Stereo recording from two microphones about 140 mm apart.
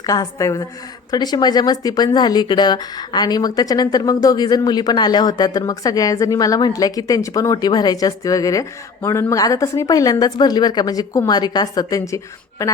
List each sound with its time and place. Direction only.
0.0 s speech: 25° left (ahead or behind)